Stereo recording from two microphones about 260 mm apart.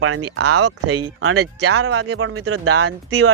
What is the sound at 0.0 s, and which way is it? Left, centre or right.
Speech, right.